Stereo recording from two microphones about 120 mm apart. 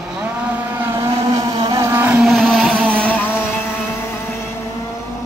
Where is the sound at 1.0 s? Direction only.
35° right (ahead or behind).